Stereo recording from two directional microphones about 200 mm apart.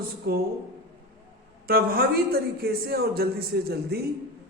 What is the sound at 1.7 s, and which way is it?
A man's voice, 50° right (ahead or behind).